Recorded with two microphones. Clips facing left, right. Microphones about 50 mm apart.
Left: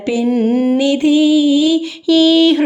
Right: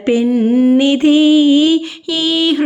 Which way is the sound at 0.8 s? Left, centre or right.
Right.